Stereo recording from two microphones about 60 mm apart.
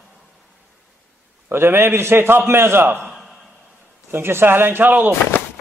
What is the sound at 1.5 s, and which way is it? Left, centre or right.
A man's voice, right.